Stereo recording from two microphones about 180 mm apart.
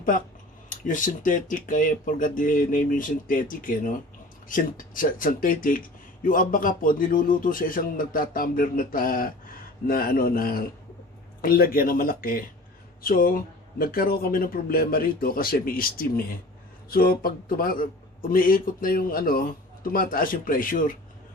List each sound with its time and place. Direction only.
0.7 s speech: 45° left (ahead or behind)